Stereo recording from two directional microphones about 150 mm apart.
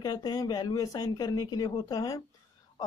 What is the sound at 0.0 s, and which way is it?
Speech, 25° left (ahead or behind).